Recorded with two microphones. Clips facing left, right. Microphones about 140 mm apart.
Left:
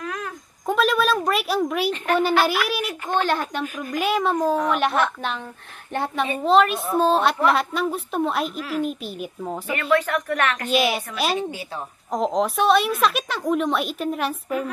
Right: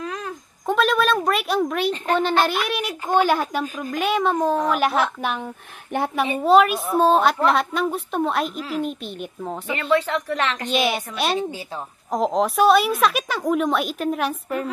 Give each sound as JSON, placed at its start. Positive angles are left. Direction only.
{"t": 0.0, "sound": "a sound", "side_deg": -25}
{"t": 0.7, "sound": "a sound", "side_deg": 0}
{"t": 2.1, "sound": "a child's voice", "side_deg": 5}
{"t": 3.1, "sound": "a woman's voice", "side_deg": -10}
{"t": 8.5, "sound": "speech", "side_deg": -30}
{"t": 8.8, "sound": "a child's voice", "side_deg": 5}
{"t": 9.8, "sound": "a woman's voice", "side_deg": -10}
{"t": 10.7, "sound": "a child's voice", "side_deg": 0}